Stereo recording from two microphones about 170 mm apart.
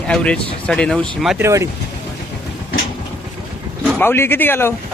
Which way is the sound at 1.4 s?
15° right (ahead or behind).